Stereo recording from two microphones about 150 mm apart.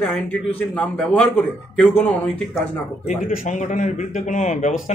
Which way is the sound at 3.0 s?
60° left (ahead or behind).